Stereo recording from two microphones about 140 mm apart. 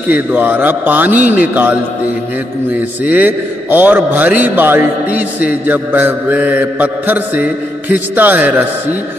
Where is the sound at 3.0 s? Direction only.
10° right (ahead or behind).